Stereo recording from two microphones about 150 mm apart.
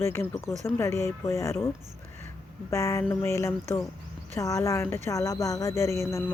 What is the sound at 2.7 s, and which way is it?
Speech, 20° left (ahead or behind).